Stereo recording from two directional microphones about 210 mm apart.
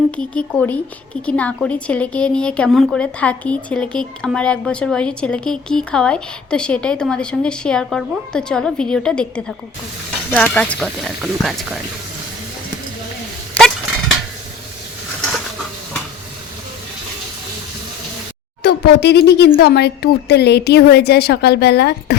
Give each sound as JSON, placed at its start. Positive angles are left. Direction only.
{"t": 0.2, "sound": "a woman's voice", "side_deg": 5}
{"t": 18.6, "sound": "a woman's voice", "side_deg": 50}